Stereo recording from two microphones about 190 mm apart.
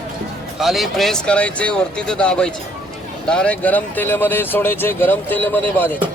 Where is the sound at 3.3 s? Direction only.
5° left (ahead or behind).